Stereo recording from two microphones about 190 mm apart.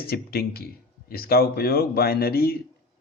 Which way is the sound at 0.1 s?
55° left (ahead or behind).